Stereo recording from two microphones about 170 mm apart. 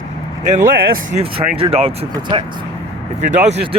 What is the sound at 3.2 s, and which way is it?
Speech, 45° right (ahead or behind).